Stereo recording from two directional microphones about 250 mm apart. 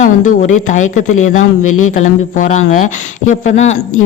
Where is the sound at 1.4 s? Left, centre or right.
Left.